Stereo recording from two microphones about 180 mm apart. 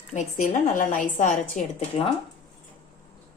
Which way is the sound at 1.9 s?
30° left (ahead or behind).